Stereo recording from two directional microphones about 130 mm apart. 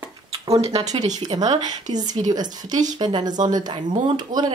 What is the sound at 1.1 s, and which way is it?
Speech, 30° right (ahead or behind).